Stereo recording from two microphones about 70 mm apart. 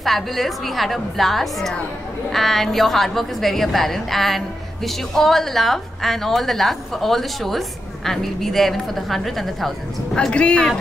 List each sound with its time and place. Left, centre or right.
0.0 s a woman's voice: centre
10.3 s speech: centre